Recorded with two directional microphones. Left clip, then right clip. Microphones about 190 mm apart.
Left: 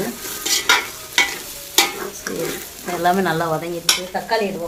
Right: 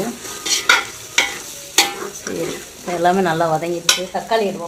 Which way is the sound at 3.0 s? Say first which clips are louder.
Right 2 dB; 20° right (ahead or behind).